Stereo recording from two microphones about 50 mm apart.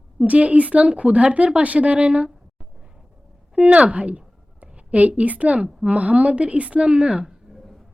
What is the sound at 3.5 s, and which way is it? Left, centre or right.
A woman's voice, right.